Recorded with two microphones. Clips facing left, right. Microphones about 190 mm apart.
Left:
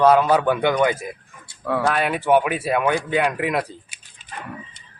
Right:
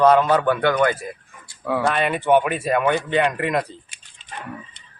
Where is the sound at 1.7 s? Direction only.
Centre (ahead or behind).